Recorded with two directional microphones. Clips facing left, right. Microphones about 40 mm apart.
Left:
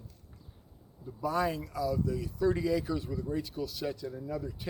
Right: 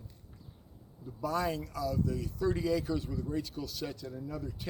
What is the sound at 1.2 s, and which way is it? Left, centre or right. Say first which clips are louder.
Speech: left 2 dB; centre.